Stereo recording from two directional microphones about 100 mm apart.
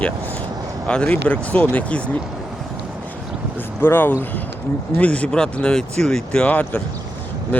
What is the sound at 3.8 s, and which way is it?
Speech, 20° left (ahead or behind).